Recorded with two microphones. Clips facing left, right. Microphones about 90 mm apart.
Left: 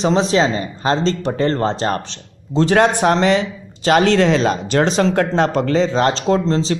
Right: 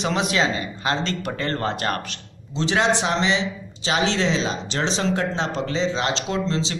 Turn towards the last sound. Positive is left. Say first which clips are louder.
# left 8 dB
turn(degrees=40)  # may be behind; listen again after turning